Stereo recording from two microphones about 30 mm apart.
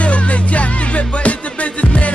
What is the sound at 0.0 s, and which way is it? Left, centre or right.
Music, left.